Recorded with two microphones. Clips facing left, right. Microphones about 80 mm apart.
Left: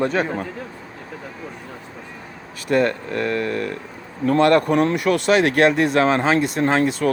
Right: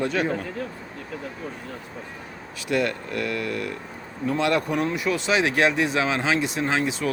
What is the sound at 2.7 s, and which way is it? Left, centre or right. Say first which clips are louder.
Speech: left 6 dB; left.